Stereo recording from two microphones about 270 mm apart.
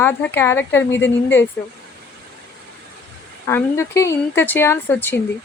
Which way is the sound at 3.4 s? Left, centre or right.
Centre.